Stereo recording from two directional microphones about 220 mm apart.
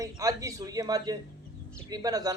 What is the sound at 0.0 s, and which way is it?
Speech, 15° right (ahead or behind).